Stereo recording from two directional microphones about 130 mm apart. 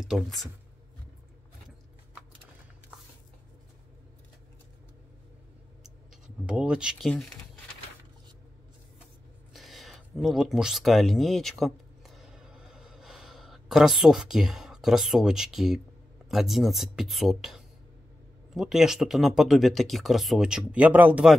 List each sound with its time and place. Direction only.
0.1 s speech: centre (ahead or behind)
6.2 s speech: 10° right (ahead or behind)
7.1 s speech: 5° left (ahead or behind)
9.5 s a sound: centre (ahead or behind)
16.3 s speech: centre (ahead or behind)